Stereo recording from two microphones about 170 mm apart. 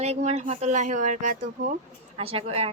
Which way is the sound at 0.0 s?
40° right (ahead or behind).